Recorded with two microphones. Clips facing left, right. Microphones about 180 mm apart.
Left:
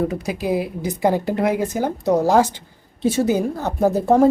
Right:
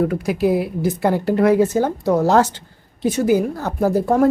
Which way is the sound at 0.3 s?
20° left (ahead or behind).